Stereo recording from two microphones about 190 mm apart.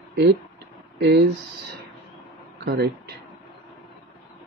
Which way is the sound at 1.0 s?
60° right (ahead or behind).